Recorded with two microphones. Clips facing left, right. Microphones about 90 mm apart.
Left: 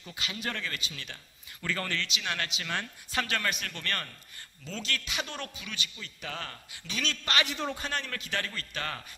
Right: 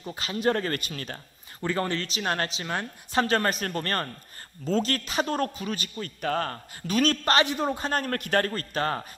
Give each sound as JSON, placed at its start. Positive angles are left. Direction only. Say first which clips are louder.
{"t": 0.0, "sound": "speech", "louder": "right 11 dB", "side_deg": -40}
{"t": 1.6, "sound": "a man's voice", "louder": "right 6 dB", "side_deg": -30}